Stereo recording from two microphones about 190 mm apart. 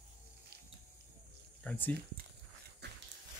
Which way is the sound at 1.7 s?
10° left (ahead or behind).